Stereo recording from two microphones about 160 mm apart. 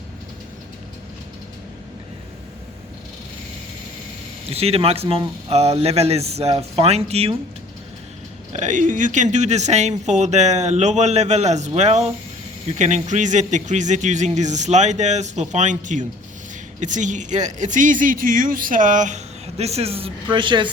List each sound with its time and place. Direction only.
4.5 s speech: 40° right (ahead or behind)
8.5 s speech: 50° right (ahead or behind); by 20.7 s 30° right (ahead or behind)